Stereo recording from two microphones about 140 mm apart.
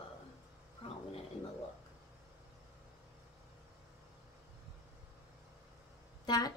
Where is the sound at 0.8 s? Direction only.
40° left (ahead or behind).